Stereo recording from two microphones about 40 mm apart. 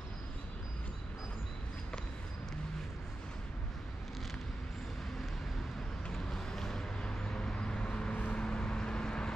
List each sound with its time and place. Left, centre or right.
6.1 s vehicle: centre